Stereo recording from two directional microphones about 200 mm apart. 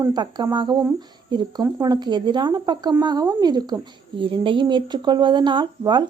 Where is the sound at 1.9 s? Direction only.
20° right (ahead or behind).